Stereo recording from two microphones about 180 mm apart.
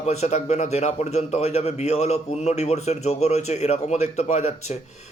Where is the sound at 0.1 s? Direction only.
40° left (ahead or behind).